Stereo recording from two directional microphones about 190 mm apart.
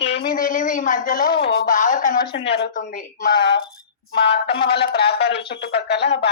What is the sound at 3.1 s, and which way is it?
Speech, 55° left (ahead or behind).